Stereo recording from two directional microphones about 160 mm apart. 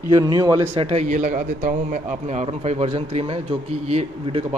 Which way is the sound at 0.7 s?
40° right (ahead or behind).